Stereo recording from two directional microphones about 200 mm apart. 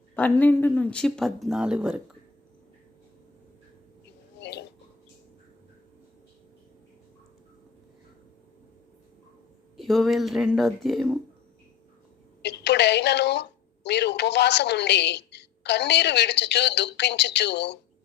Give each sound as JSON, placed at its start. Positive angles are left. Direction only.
{"t": 0.2, "sound": "speech", "side_deg": 10}
{"t": 4.4, "sound": "a sound", "side_deg": 60}
{"t": 9.7, "sound": "speech", "side_deg": 0}
{"t": 12.4, "sound": "a woman's voice", "side_deg": 55}